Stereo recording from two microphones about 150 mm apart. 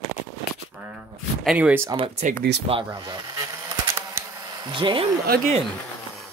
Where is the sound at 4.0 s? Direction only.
20° right (ahead or behind).